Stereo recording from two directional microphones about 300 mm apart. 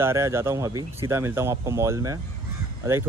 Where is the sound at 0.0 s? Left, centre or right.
Centre.